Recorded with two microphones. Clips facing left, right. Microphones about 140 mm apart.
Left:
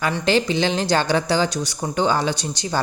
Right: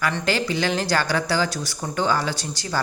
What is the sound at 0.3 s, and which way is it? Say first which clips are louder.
Speech: left 6 dB; 20° left (ahead or behind).